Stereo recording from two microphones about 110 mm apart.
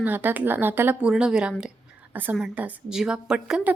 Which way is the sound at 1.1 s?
5° right (ahead or behind).